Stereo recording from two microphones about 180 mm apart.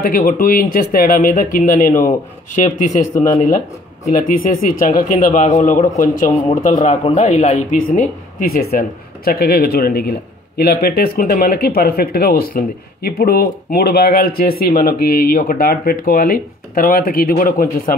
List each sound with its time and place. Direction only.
0.0 s speech: 50° left (ahead or behind)
4.7 s speech: 50° left (ahead or behind)
8.5 s speech: 55° left (ahead or behind)